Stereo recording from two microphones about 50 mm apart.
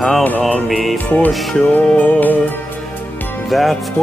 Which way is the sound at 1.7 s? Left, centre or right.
Left.